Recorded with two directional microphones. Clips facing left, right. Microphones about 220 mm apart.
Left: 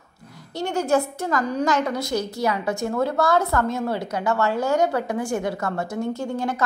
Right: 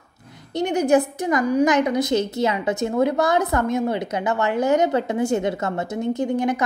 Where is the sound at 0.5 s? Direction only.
20° right (ahead or behind).